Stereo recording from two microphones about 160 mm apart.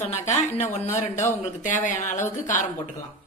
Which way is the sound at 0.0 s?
45° left (ahead or behind).